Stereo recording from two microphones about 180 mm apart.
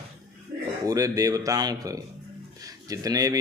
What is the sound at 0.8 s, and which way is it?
A man's voice, 20° right (ahead or behind).